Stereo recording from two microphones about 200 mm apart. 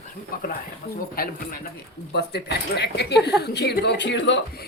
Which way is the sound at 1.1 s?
45° left (ahead or behind).